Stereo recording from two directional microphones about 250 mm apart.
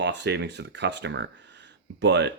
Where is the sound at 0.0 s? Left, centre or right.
Right.